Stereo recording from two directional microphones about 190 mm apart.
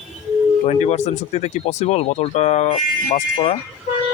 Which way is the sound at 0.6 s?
35° left (ahead or behind).